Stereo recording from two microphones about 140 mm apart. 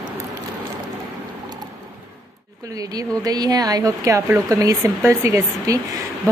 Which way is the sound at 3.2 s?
30° right (ahead or behind).